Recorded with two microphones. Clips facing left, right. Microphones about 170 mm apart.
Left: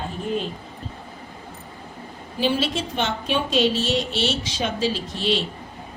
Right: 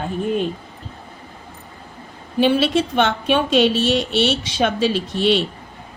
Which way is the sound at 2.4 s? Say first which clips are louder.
Right 7 dB; 60° right (ahead or behind).